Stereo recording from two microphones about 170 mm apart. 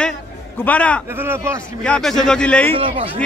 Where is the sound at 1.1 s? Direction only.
15° right (ahead or behind).